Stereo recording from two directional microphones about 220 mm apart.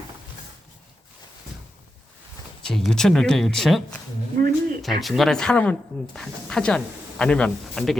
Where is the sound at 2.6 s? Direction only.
Centre (ahead or behind).